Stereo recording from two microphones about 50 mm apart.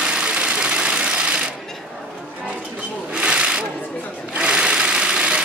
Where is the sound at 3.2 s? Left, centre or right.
Centre.